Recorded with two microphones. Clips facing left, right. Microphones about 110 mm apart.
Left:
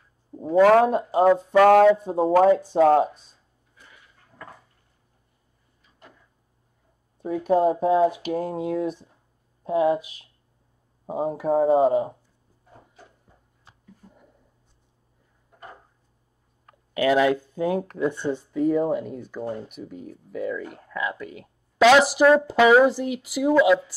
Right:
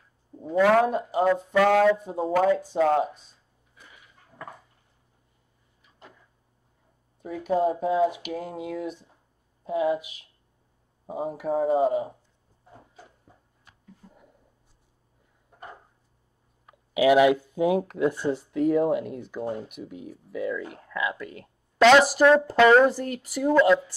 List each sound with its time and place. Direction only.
0.4 s speech: 40° left (ahead or behind)
1.2 s speech: 20° left (ahead or behind)
1.6 s speech: 40° left (ahead or behind)
7.2 s speech: 35° left (ahead or behind)
11.1 s speech: 40° left (ahead or behind)
13.7 s a sound: 30° left (ahead or behind)
16.9 s speech: 10° right (ahead or behind); by 23.8 s 5° left (ahead or behind)